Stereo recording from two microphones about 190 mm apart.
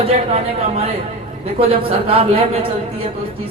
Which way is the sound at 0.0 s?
30° right (ahead or behind).